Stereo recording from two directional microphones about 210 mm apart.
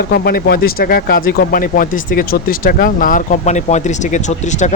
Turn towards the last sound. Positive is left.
turn(degrees=35)  # may be behind; listen again after turning